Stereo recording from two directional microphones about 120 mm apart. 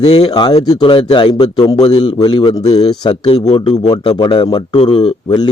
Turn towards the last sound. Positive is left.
turn(degrees=35)  # may be behind; listen again after turning